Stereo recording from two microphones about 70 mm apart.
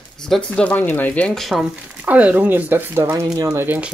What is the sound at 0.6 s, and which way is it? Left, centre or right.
Speech, left.